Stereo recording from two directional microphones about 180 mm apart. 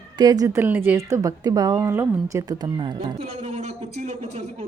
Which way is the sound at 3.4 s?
40° right (ahead or behind).